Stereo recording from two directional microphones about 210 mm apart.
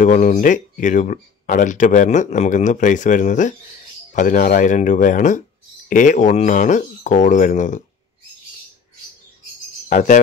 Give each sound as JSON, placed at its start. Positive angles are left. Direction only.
{"t": 0.0, "sound": "speech", "side_deg": 35}
{"t": 9.8, "sound": "jingle bell", "side_deg": 35}